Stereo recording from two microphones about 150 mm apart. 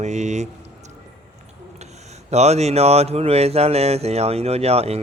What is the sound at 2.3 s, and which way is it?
Speech, 45° right (ahead or behind).